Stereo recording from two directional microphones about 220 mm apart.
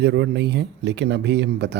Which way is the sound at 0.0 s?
50° right (ahead or behind).